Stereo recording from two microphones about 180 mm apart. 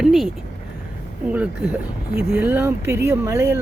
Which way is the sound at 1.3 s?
5° right (ahead or behind).